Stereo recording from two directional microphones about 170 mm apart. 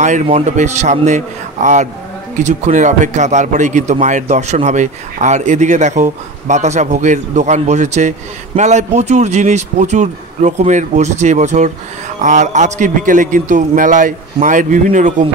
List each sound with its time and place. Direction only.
0.0 s speech: 45° right (ahead or behind)